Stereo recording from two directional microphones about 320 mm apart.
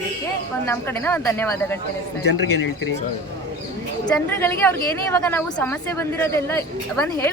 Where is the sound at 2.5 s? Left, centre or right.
Left.